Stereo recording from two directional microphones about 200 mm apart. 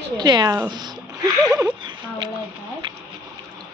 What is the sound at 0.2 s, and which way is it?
Speech, 20° right (ahead or behind).